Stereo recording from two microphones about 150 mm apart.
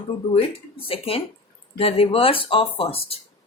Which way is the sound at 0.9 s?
40° left (ahead or behind).